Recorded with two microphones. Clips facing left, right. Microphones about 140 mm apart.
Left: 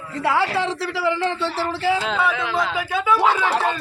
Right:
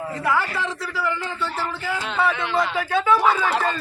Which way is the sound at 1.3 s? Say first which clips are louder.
Left 4 dB; 30° left (ahead or behind).